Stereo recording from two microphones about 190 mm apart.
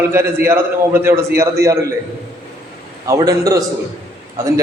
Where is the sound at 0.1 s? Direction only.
15° right (ahead or behind).